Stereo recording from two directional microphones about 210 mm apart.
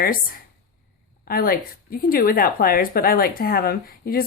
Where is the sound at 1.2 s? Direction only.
45° left (ahead or behind).